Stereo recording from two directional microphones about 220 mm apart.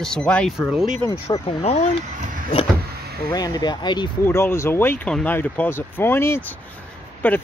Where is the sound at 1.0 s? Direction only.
20° left (ahead or behind).